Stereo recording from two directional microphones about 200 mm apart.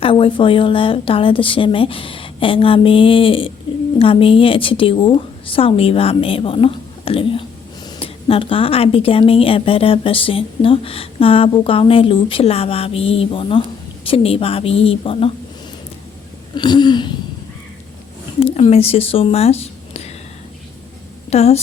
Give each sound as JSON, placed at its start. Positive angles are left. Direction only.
{"t": 0.0, "sound": "a woman's voice", "side_deg": 25}
{"t": 16.6, "sound": "a woman's voice", "side_deg": 20}
{"t": 18.5, "sound": "speech", "side_deg": 30}
{"t": 21.2, "sound": "a woman's voice", "side_deg": 30}